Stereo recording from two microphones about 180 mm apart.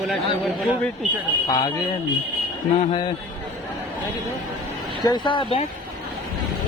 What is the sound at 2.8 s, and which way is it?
Speech, 30° left (ahead or behind).